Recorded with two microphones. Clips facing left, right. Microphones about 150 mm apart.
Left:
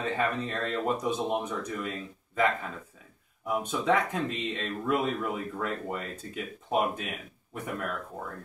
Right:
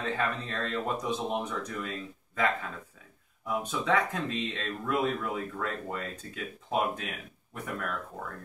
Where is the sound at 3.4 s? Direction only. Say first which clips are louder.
Left 3 dB; 10° left (ahead or behind).